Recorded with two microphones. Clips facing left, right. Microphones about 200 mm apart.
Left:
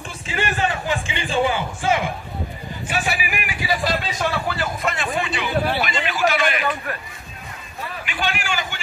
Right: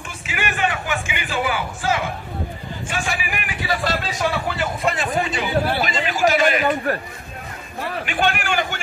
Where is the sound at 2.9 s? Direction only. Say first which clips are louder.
Left 2 dB; 10° left (ahead or behind).